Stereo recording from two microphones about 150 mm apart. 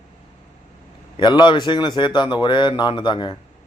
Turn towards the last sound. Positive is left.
turn(degrees=30)  # may be behind; listen again after turning